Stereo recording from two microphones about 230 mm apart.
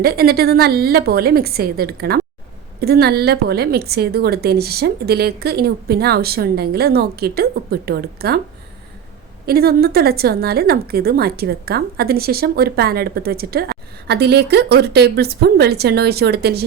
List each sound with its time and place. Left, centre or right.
0.0 s a woman's voice: right
9.5 s a woman's voice: right